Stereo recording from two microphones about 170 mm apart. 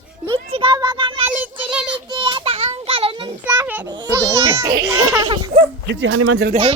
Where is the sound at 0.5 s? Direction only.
30° right (ahead or behind).